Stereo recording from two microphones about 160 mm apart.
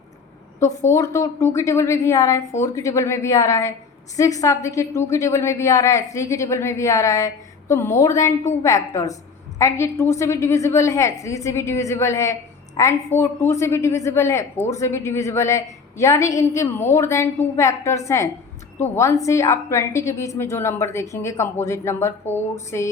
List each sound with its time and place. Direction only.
0.6 s a woman's voice: 15° left (ahead or behind)